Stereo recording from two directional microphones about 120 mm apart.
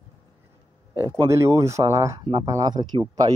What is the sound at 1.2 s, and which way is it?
Speech, 25° right (ahead or behind).